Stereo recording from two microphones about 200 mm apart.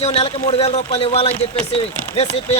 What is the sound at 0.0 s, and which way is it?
A man's voice, 30° left (ahead or behind).